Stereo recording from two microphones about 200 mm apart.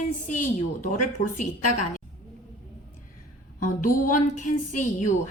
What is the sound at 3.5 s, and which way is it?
Speech, 45° left (ahead or behind).